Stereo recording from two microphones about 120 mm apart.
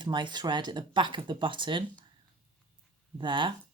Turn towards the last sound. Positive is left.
turn(degrees=-45)  # may be behind; listen again after turning